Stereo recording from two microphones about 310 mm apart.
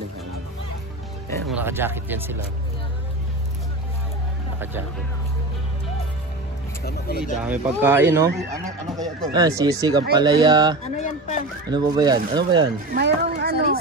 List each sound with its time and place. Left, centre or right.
1.5 s speech: centre
6.8 s speech: left
7.4 s speech: centre
10.8 s speech: left
11.7 s speech: centre
12.9 s speech: right